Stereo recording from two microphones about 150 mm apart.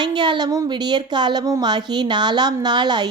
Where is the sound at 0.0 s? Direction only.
30° right (ahead or behind).